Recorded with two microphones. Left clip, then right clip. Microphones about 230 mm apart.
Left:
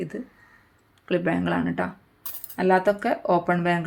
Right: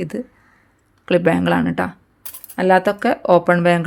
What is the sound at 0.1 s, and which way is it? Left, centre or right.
Speech, right.